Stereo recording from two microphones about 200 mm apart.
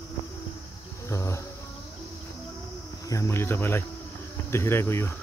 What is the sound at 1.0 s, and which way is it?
Speech, 15° left (ahead or behind).